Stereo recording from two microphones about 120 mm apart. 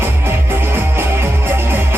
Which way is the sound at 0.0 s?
20° right (ahead or behind).